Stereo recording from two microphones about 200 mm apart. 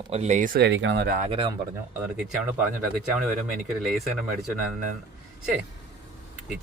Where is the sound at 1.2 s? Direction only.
30° right (ahead or behind).